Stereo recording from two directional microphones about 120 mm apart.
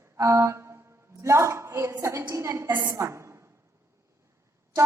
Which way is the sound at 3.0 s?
25° right (ahead or behind).